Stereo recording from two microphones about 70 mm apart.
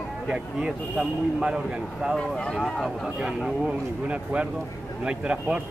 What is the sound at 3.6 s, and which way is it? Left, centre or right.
Speech, centre.